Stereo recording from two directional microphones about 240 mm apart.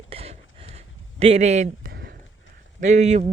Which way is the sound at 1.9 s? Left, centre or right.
Right.